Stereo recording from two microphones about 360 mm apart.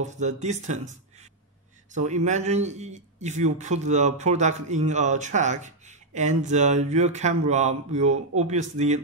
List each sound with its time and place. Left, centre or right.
0.0 s a man's voice: centre
2.0 s a man's voice: centre